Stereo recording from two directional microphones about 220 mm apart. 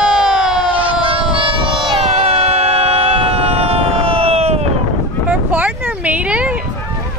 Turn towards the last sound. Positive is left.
turn(degrees=-5)  # may be behind; listen again after turning